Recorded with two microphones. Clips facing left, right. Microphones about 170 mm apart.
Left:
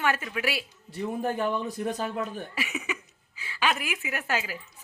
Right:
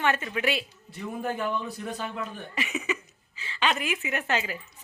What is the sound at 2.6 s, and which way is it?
Speech, 10° left (ahead or behind).